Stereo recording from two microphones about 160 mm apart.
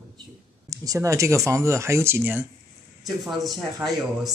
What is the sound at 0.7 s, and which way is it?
Speech, 20° right (ahead or behind).